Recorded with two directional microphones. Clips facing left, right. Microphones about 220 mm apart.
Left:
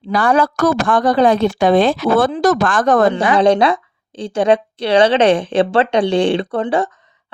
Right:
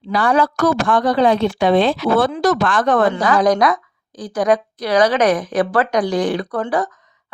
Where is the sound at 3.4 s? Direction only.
30° left (ahead or behind).